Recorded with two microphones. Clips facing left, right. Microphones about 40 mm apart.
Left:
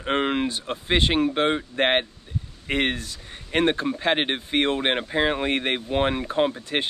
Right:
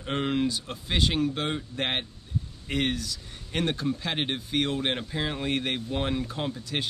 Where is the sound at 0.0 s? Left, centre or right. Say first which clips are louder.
Left 4 dB; left.